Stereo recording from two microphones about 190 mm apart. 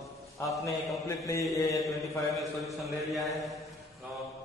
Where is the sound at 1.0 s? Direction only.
15° left (ahead or behind).